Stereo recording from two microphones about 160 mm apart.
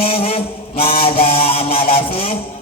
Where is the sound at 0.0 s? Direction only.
35° left (ahead or behind).